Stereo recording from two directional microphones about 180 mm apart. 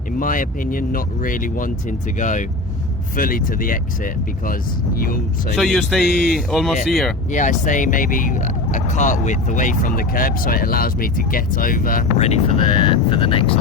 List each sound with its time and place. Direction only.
0.2 s speech: 50° left (ahead or behind)
5.5 s speech: centre (ahead or behind)
7.3 s speech: 45° left (ahead or behind)
12.1 s speech: 35° left (ahead or behind)